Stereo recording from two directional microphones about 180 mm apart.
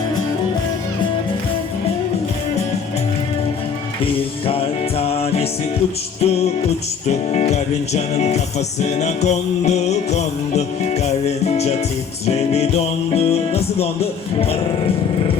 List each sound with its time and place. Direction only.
4.0 s music: 30° left (ahead or behind)